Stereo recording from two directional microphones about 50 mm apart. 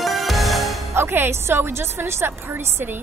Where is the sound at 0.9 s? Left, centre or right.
Right.